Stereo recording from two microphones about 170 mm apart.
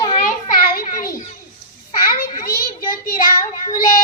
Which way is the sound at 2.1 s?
60° left (ahead or behind).